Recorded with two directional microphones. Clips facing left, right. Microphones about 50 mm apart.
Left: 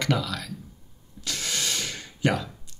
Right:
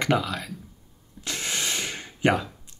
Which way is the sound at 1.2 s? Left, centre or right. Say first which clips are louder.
Right 1 dB; right.